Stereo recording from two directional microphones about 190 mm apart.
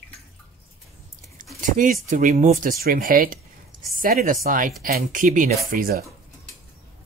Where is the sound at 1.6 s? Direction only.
45° right (ahead or behind).